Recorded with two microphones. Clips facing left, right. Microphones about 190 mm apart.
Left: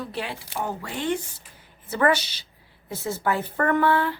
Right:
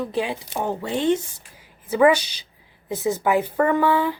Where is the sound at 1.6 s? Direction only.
10° right (ahead or behind).